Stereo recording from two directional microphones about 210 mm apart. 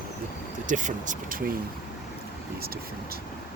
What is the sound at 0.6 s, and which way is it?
Speech, 35° right (ahead or behind).